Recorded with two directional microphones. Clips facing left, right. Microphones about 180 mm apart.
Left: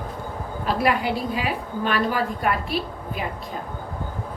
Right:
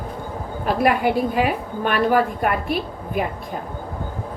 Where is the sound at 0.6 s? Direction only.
50° right (ahead or behind).